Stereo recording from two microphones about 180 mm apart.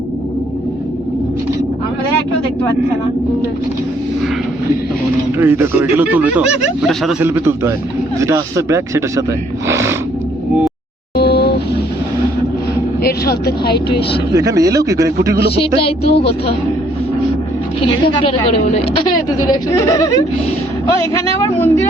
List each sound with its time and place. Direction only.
5.4 s speech: 15° right (ahead or behind)
7.2 s speech: 15° right (ahead or behind)
11.2 s vehicle: 65° left (ahead or behind)
13.0 s speech: 60° left (ahead or behind)
14.3 s speech: 20° right (ahead or behind)
15.5 s music: 30° left (ahead or behind)
16.0 s speech: 65° left (ahead or behind)
18.0 s a woman's voice: 30° left (ahead or behind)